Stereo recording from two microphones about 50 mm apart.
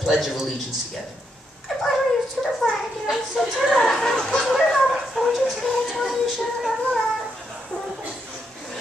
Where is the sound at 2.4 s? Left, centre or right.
Centre.